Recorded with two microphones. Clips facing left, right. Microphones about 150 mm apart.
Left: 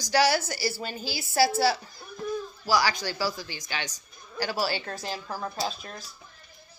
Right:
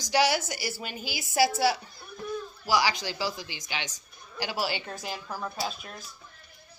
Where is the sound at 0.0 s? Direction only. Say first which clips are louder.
Left 2 dB; 20° right (ahead or behind).